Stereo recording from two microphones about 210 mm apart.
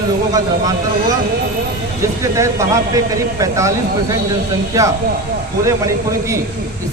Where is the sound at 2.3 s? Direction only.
15° right (ahead or behind).